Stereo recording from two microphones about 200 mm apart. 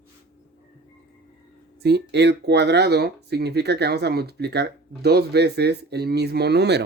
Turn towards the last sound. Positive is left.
turn(degrees=-55)  # may be behind; listen again after turning